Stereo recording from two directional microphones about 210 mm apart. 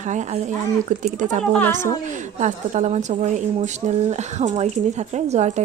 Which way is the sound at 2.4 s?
35° right (ahead or behind).